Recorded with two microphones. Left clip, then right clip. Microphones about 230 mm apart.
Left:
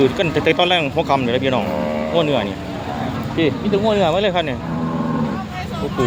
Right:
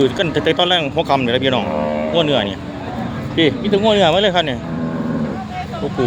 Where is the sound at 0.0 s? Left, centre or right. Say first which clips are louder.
Even; centre.